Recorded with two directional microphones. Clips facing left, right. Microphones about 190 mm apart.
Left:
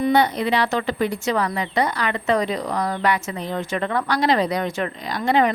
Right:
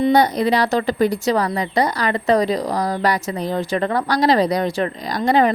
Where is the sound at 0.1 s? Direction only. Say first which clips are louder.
Right 3 dB; 40° right (ahead or behind).